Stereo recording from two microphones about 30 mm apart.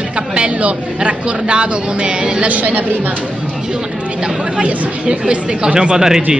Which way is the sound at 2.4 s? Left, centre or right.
Right.